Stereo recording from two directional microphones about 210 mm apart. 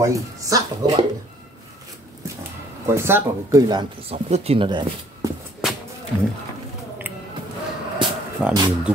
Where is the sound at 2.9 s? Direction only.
10° right (ahead or behind).